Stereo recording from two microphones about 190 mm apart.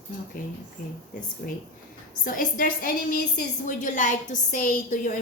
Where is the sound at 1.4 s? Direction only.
50° left (ahead or behind).